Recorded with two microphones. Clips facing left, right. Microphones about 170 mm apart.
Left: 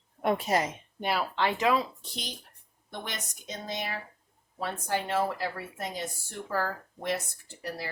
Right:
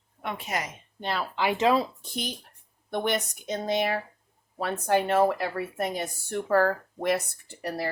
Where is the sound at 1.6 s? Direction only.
30° right (ahead or behind).